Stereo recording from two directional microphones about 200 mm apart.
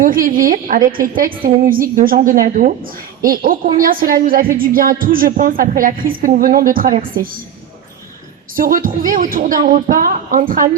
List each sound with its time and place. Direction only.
0.0 s a woman's voice: 45° right (ahead or behind)
8.5 s a woman's voice: 45° right (ahead or behind)